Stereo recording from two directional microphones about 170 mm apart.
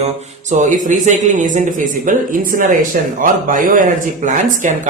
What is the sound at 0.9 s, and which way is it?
Speech, 45° right (ahead or behind).